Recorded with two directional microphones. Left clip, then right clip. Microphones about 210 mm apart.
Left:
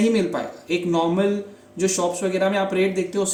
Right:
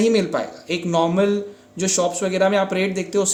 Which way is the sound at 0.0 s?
45° right (ahead or behind).